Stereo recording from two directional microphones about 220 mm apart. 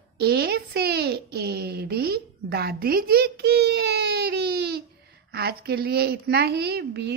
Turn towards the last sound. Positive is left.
turn(degrees=-50)  # may be behind; listen again after turning